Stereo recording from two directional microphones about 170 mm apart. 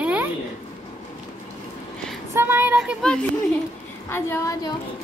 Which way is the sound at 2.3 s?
10° right (ahead or behind).